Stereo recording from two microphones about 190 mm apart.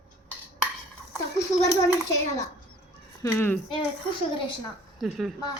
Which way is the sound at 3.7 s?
25° left (ahead or behind).